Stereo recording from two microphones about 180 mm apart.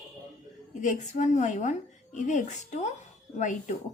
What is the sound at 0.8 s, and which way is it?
A woman's voice, 45° left (ahead or behind).